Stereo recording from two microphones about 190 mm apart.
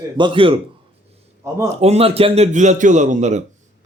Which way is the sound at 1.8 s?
35° right (ahead or behind).